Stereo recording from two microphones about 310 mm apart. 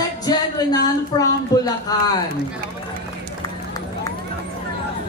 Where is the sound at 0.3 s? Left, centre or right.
Centre.